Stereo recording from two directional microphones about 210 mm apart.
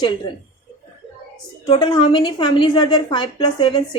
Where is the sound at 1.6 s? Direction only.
25° left (ahead or behind).